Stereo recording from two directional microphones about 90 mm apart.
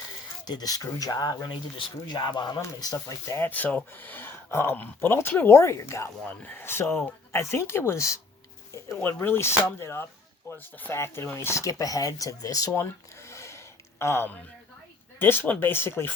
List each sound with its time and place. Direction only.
0.4 s speech: 45° left (ahead or behind)
2.8 s speech: 40° left (ahead or behind)
3.4 s speech: 20° left (ahead or behind)
6.2 s speech: 20° left (ahead or behind)
9.0 s speech: 20° left (ahead or behind)